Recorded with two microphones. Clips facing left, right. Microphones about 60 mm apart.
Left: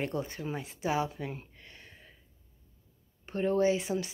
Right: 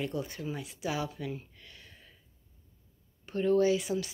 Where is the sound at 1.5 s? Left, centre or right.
Left.